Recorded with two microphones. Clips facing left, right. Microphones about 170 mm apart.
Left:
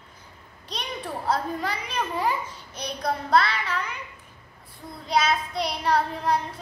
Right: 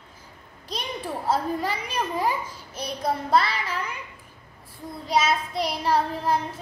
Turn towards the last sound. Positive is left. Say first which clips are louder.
# even
turn(degrees=-5)  # may be behind; listen again after turning